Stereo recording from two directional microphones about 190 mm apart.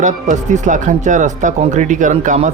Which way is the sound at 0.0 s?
40° right (ahead or behind).